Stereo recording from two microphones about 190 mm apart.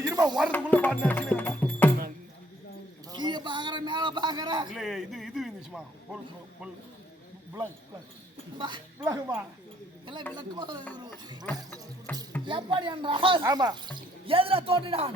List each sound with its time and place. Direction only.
0.0 s music: 15° right (ahead or behind)
0.5 s music: 5° left (ahead or behind)
3.1 s a sound: 25° right (ahead or behind)
4.7 s speech: centre (ahead or behind)
8.5 s speech: 25° right (ahead or behind)
12.1 s speech: 10° left (ahead or behind)
12.5 s speech: 25° right (ahead or behind)